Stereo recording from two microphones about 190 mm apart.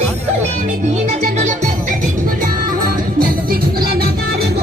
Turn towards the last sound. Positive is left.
turn(degrees=-50)  # may be behind; listen again after turning